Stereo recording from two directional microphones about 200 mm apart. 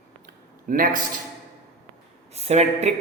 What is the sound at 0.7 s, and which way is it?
Speech, 40° right (ahead or behind).